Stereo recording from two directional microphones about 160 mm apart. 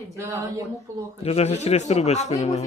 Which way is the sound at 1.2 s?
40° left (ahead or behind).